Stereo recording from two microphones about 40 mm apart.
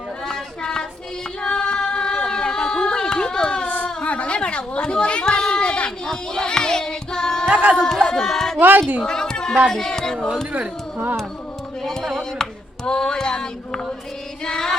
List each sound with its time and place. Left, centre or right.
0.3 s a sound: centre
1.4 s singing: left
2.1 s a sound: centre
4.0 s a sound: left
6.1 s child singing: centre
7.5 s speech: right
8.0 s child singing: centre
8.5 s speech: right
9.0 s speech: centre
9.6 s child singing: centre
10.9 s music: right
11.8 s a sound: centre
14.4 s music: centre